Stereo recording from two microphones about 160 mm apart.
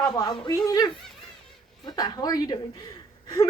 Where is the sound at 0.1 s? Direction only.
25° left (ahead or behind).